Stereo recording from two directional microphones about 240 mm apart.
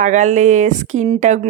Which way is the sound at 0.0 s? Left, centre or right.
Right.